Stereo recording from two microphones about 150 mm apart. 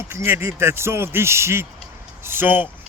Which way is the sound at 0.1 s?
15° right (ahead or behind).